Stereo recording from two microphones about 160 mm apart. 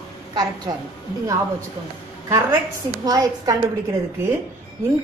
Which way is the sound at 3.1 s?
25° right (ahead or behind).